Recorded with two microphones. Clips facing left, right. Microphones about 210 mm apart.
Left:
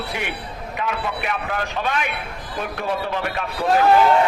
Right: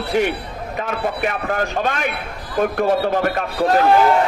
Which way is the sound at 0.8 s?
45° right (ahead or behind).